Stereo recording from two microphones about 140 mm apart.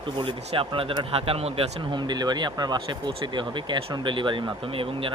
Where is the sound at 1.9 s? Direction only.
30° right (ahead or behind).